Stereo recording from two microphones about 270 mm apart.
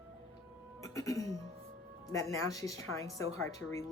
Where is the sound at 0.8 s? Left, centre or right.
Centre.